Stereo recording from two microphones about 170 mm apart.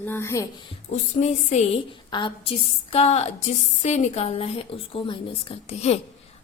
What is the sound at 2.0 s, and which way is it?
A woman's voice, 30° left (ahead or behind).